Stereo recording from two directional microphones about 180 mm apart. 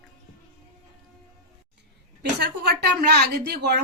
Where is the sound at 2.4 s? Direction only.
65° right (ahead or behind).